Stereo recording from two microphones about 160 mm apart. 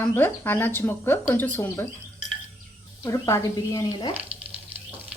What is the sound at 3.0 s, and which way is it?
Speech, 20° left (ahead or behind).